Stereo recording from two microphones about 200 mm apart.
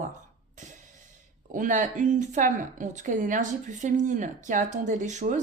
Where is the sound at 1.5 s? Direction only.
40° right (ahead or behind).